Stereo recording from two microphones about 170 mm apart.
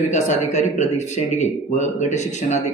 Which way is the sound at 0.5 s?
45° left (ahead or behind).